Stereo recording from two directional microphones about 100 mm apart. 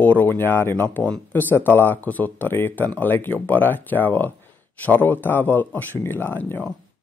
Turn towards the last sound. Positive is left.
turn(degrees=20)  # may be behind; listen again after turning